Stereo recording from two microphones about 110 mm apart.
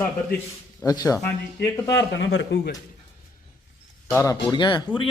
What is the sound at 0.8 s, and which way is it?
A man's voice, 35° left (ahead or behind).